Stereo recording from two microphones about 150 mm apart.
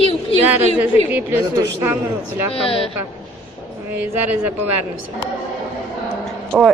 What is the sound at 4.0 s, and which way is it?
Speech, 10° right (ahead or behind).